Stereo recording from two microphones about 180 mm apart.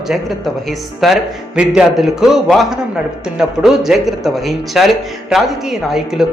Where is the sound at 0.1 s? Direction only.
Centre (ahead or behind).